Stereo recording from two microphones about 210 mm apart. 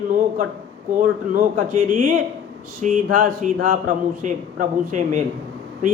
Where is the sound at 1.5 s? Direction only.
35° right (ahead or behind).